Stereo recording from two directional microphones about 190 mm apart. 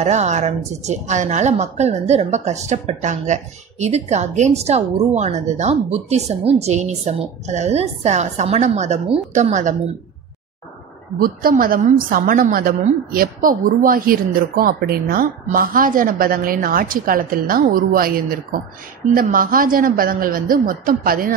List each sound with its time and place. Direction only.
0.0 s a woman's voice: 35° right (ahead or behind)
11.1 s a woman's voice: 50° right (ahead or behind)